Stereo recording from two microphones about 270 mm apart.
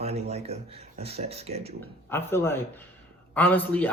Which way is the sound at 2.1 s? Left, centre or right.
Centre.